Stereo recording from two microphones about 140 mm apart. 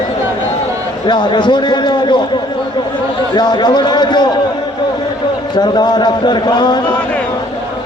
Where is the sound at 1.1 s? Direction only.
35° left (ahead or behind).